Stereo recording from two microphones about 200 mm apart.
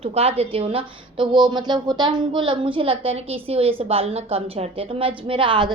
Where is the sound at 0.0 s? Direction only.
30° right (ahead or behind).